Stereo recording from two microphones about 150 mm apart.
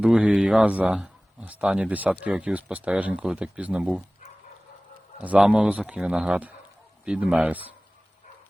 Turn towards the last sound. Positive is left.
turn(degrees=-10)  # may be behind; listen again after turning